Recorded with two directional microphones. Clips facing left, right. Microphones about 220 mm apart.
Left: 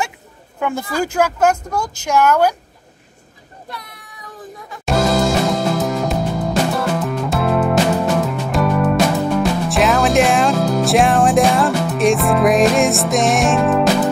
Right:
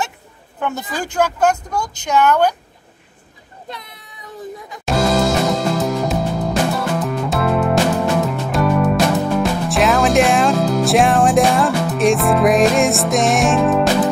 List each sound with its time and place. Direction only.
0.6 s speech: 10° left (ahead or behind)
2.0 s speech: 10° left (ahead or behind)
3.6 s a sound: 20° right (ahead or behind)
4.8 s music: centre (ahead or behind)